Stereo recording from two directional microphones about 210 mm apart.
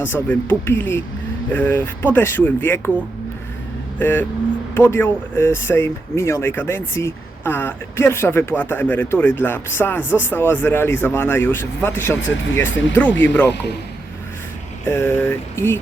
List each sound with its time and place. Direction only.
0.0 s speech: 10° left (ahead or behind)
3.9 s speech: 10° left (ahead or behind)
12.7 s speech: 60° left (ahead or behind)
13.0 s speech: 10° left (ahead or behind)
14.8 s speech: 10° left (ahead or behind)